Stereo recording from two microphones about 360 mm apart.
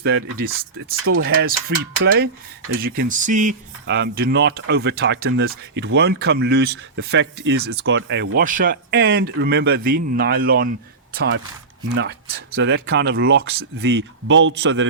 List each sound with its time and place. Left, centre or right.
0.0 s speech: right
2.8 s speech: right
12.5 s speech: right